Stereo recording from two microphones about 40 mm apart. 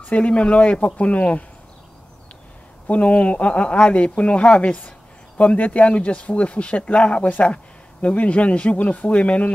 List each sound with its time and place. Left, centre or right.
0.0 s speech: left
2.9 s speech: left